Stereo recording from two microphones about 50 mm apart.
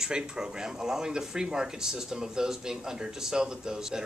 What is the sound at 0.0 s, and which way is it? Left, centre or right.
Speech, centre.